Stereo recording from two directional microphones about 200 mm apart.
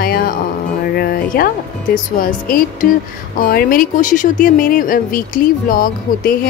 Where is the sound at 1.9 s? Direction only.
45° left (ahead or behind).